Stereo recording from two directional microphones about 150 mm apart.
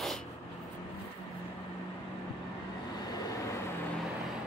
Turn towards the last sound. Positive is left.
turn(degrees=25)  # may be behind; listen again after turning